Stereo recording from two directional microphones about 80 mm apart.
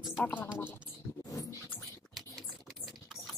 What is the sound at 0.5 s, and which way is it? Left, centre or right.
Speech, left.